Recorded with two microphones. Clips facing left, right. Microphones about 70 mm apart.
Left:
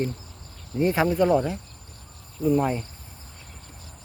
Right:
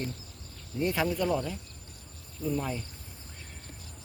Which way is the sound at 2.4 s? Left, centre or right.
Left.